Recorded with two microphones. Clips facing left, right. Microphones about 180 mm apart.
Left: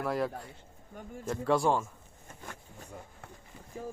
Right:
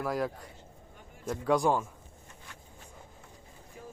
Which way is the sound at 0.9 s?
45° left (ahead or behind).